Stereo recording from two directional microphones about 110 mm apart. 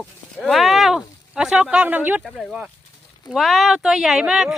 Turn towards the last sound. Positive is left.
turn(degrees=-5)  # may be behind; listen again after turning